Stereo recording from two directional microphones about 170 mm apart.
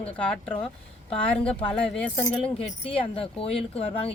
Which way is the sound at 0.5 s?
35° left (ahead or behind).